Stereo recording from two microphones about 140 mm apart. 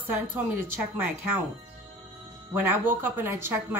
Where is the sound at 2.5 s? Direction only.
15° right (ahead or behind).